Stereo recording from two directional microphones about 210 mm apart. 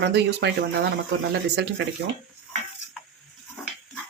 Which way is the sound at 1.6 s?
55° right (ahead or behind).